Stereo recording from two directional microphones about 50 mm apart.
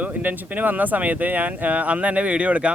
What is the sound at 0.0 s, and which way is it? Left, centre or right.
Speech, right.